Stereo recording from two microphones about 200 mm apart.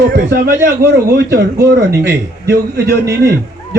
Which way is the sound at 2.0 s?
55° right (ahead or behind).